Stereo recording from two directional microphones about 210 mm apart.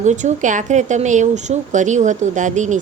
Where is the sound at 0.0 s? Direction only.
35° right (ahead or behind).